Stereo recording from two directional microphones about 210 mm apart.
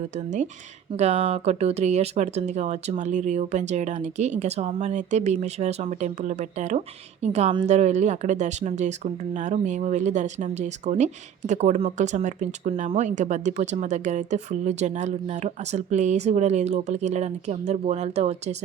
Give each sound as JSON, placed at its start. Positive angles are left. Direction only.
{"t": 0.9, "sound": "speech", "side_deg": -30}